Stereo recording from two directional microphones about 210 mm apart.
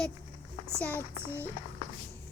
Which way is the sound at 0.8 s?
10° left (ahead or behind).